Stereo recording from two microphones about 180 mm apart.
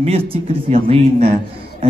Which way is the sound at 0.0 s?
30° right (ahead or behind).